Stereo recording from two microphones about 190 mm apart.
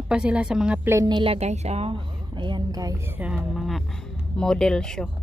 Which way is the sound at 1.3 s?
35° right (ahead or behind).